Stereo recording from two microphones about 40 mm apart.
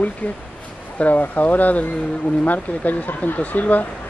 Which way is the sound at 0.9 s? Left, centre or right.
Left.